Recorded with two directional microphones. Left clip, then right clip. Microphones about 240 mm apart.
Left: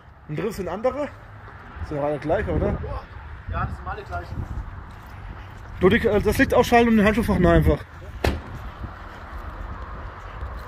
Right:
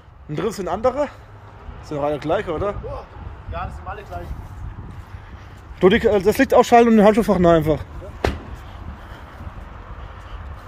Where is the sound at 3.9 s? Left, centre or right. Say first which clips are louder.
Even; centre.